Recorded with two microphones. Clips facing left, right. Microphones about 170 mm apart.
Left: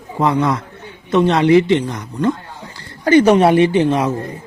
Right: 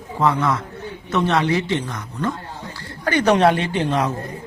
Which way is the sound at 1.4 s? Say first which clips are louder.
Left 10 dB; 60° left (ahead or behind).